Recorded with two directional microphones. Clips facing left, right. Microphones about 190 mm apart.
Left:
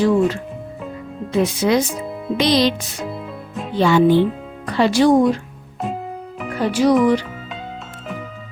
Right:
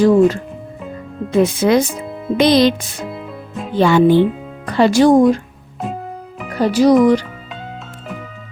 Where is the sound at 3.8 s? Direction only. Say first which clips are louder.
Right 3 dB; 55° right (ahead or behind).